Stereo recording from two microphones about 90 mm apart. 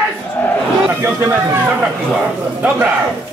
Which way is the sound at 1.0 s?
25° right (ahead or behind).